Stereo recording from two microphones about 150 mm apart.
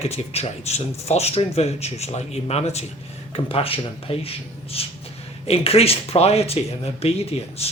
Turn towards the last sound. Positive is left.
turn(degrees=40)  # may be behind; listen again after turning